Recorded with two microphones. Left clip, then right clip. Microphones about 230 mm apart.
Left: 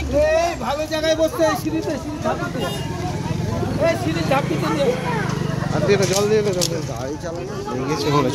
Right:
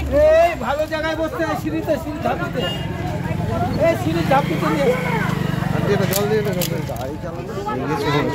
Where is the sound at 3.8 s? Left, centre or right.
Right.